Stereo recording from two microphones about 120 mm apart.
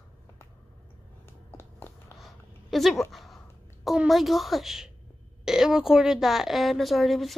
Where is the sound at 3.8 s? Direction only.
Centre (ahead or behind).